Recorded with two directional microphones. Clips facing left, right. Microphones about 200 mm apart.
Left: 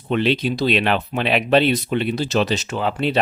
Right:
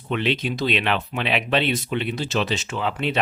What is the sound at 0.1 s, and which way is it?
Speech, 35° left (ahead or behind).